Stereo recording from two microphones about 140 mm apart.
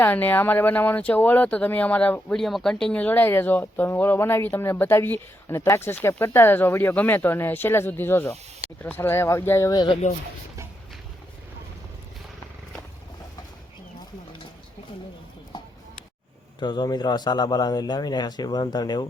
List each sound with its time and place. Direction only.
0.0 s speech: 10° left (ahead or behind)
10.0 s speech: 55° left (ahead or behind)
16.6 s a man's voice: 30° left (ahead or behind)